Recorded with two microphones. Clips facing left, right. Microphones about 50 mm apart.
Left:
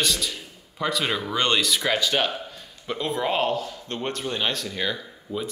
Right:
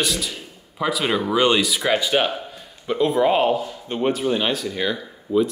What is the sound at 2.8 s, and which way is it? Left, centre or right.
Speech, centre.